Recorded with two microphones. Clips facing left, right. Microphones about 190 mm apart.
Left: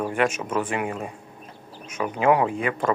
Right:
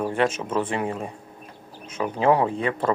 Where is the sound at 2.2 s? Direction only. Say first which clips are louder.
Even; 30° right (ahead or behind).